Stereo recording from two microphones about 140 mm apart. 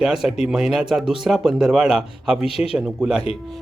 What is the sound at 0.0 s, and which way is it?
Speech, centre (ahead or behind).